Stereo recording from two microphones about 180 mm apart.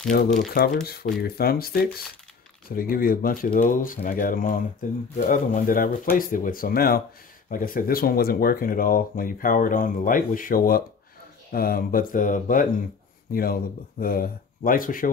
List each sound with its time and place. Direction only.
0.1 s speech: 55° left (ahead or behind)